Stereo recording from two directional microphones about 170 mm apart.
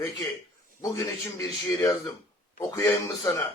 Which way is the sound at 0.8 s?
20° left (ahead or behind).